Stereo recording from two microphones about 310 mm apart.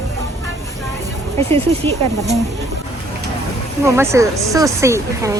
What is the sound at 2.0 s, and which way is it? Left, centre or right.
Speech, right.